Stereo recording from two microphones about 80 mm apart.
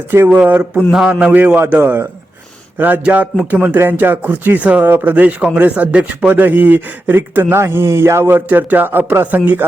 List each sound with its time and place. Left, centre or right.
0.3 s speech: centre
0.8 s speech: centre